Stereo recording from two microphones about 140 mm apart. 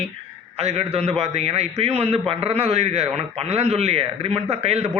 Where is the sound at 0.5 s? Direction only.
50° right (ahead or behind).